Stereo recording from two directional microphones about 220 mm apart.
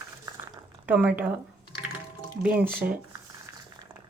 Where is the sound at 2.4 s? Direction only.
10° right (ahead or behind).